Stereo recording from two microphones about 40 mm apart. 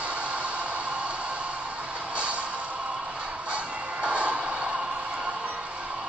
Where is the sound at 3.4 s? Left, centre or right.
Right.